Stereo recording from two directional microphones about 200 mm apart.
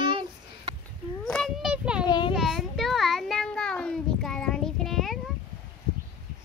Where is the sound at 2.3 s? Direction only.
Centre (ahead or behind).